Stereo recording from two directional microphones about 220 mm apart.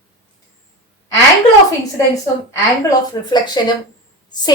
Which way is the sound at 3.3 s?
20° left (ahead or behind).